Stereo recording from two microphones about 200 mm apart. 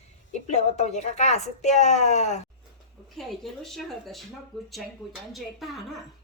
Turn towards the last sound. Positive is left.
turn(degrees=0)  # may be behind; listen again after turning